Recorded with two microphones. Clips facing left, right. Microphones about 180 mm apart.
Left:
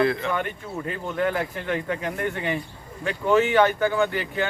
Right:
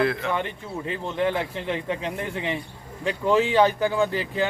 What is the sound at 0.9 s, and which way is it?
Speech, 25° right (ahead or behind).